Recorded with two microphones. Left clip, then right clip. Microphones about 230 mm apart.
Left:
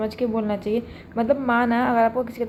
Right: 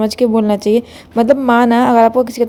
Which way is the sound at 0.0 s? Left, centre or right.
Right.